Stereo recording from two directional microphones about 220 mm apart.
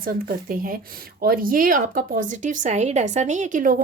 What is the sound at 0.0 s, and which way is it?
Speech, 40° right (ahead or behind).